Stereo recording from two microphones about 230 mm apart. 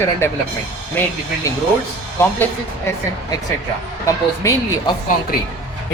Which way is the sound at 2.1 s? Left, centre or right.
Centre.